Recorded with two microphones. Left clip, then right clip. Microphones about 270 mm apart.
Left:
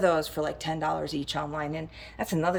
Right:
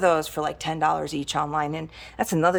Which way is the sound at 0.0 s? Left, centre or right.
Centre.